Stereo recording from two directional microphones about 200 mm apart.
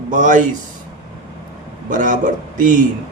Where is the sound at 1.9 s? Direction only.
40° right (ahead or behind).